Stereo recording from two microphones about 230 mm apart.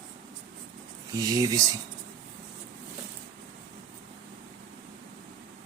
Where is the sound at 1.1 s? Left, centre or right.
Centre.